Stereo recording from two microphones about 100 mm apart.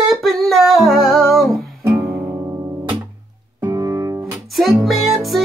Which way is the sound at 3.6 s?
35° right (ahead or behind).